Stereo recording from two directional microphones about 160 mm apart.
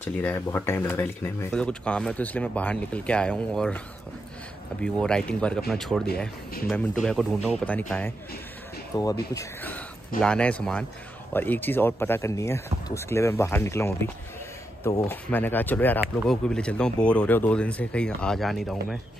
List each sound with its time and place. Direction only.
0.0 s speech: 10° left (ahead or behind)
4.8 s speech: 5° left (ahead or behind)
8.9 s speech: 25° left (ahead or behind); by 18.9 s centre (ahead or behind)